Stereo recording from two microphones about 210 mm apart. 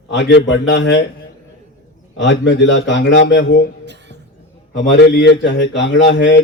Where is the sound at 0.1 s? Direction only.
60° left (ahead or behind).